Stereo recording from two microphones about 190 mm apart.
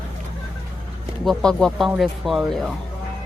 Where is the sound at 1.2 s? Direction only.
Centre (ahead or behind).